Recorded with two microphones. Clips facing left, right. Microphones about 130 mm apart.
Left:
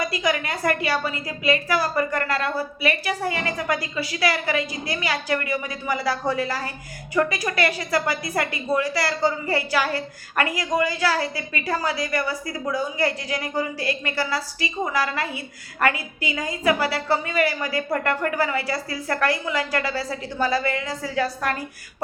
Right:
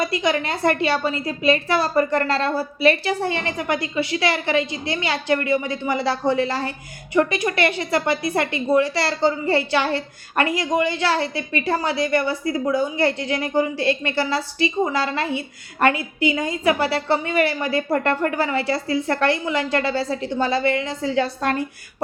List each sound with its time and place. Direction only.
0.0 s a woman's voice: 25° right (ahead or behind)